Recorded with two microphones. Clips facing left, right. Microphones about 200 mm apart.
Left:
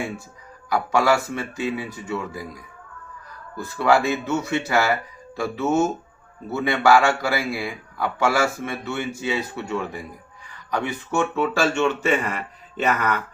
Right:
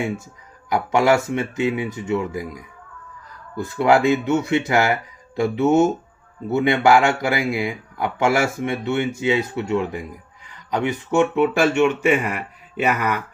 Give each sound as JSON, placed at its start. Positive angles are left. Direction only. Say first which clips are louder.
{"t": 0.7, "sound": "a man's voice", "louder": "right 3 dB", "side_deg": -20}